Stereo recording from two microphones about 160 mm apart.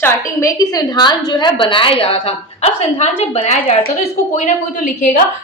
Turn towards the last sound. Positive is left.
turn(degrees=50)  # may be behind; listen again after turning